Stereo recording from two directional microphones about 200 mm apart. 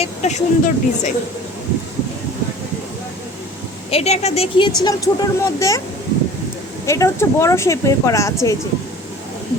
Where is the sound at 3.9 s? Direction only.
35° left (ahead or behind); by 5.8 s 15° left (ahead or behind).